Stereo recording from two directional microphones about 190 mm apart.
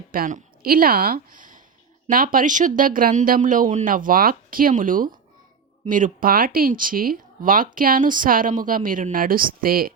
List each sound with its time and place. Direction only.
0.1 s speech: 45° right (ahead or behind)